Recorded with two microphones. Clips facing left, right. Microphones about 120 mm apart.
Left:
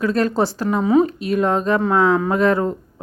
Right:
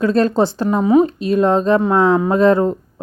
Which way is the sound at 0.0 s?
25° right (ahead or behind).